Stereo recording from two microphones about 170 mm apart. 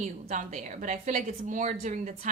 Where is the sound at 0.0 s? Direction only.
45° right (ahead or behind).